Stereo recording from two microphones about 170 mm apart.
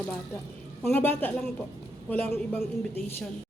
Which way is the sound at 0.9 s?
10° left (ahead or behind).